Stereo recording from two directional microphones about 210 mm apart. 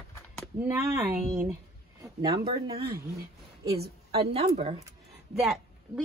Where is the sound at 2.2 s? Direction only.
20° right (ahead or behind).